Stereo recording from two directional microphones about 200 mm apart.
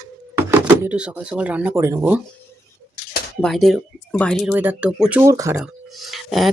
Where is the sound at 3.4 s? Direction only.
Centre (ahead or behind); by 5.6 s 15° right (ahead or behind).